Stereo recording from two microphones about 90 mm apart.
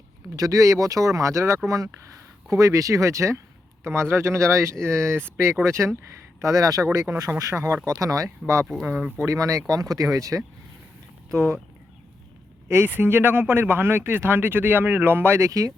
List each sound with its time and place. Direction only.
0.3 s speech: 40° right (ahead or behind)
8.6 s speech: centre (ahead or behind)
8.9 s speech: 20° right (ahead or behind)
9.1 s speech: 35° right (ahead or behind)
12.6 s speech: 30° right (ahead or behind)